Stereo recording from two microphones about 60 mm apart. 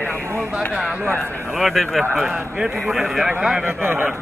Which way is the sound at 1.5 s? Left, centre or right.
Centre.